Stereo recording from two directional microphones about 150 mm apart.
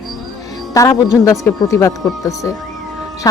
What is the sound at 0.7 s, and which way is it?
Speech, 25° left (ahead or behind).